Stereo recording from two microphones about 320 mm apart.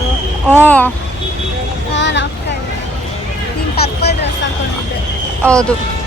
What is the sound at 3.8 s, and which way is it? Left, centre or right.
Speech, left.